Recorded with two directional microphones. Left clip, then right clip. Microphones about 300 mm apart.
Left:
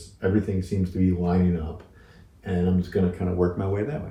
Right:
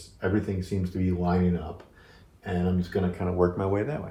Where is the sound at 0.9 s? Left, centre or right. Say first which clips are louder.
Left 6 dB; centre.